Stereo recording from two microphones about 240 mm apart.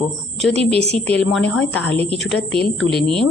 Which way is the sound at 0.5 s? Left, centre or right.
Right.